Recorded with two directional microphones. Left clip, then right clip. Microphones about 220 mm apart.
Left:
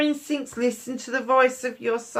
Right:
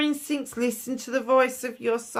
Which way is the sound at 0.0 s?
45° right (ahead or behind).